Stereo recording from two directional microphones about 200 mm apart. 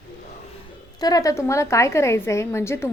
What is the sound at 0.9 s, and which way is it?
A woman's voice, 20° left (ahead or behind).